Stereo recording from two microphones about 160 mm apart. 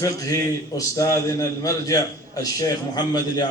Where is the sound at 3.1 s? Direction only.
25° left (ahead or behind).